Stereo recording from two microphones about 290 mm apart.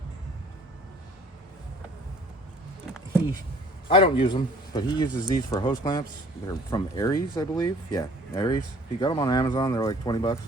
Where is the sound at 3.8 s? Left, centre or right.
Centre.